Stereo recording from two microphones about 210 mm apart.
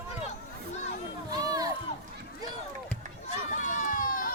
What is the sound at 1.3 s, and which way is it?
Run, 20° right (ahead or behind).